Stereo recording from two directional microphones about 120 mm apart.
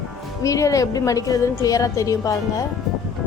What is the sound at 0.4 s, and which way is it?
A woman's voice, 25° left (ahead or behind).